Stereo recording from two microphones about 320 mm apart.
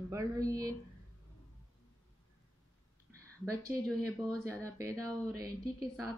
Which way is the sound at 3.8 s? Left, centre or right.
Centre.